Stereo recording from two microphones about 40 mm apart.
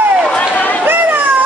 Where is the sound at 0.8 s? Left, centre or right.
Right.